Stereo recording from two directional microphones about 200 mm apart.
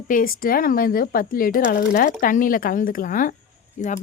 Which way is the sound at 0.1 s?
45° left (ahead or behind).